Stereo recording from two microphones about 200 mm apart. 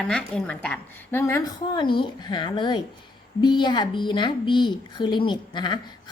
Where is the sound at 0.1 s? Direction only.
5° left (ahead or behind).